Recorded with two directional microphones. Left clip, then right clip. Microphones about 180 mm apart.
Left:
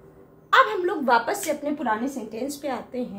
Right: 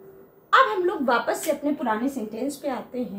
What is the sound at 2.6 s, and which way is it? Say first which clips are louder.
Speech: even; 30° left (ahead or behind).